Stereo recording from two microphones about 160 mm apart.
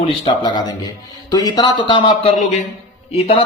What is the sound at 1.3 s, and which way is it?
Speech, 25° left (ahead or behind).